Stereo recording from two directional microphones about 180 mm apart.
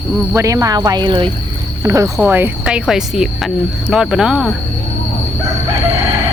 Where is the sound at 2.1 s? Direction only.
10° right (ahead or behind).